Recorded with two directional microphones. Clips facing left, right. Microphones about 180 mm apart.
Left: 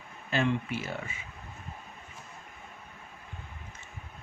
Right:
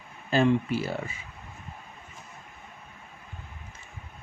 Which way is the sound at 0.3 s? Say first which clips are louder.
Right 6 dB; 35° right (ahead or behind).